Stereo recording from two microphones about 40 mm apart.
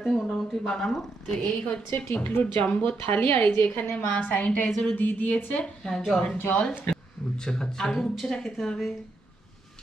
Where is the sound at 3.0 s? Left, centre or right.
Left.